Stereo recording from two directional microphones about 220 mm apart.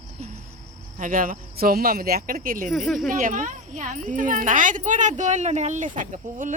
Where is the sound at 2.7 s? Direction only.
Centre (ahead or behind).